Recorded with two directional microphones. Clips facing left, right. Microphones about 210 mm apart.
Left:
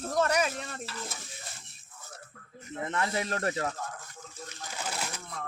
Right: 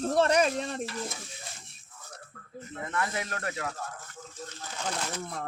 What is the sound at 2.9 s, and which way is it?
Speech, 25° left (ahead or behind).